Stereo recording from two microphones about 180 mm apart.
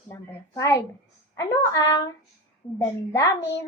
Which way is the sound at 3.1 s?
20° left (ahead or behind).